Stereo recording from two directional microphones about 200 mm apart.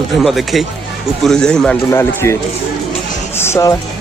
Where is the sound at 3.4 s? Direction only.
15° left (ahead or behind).